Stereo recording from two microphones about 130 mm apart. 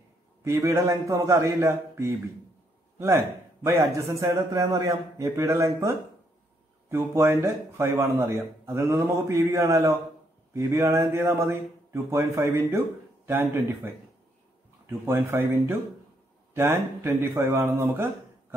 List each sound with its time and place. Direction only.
0.4 s speech: 25° right (ahead or behind)
3.6 s speech: 20° right (ahead or behind)